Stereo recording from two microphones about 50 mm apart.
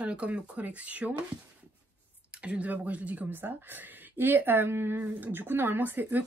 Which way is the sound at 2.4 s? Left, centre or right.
Right.